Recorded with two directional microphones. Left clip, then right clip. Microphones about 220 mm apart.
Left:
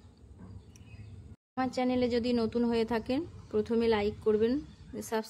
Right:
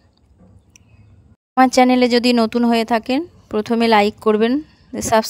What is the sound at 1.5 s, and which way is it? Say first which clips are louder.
Speech: right 18 dB; 50° right (ahead or behind).